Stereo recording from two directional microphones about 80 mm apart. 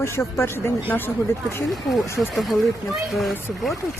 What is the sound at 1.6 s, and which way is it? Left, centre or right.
Speech, centre.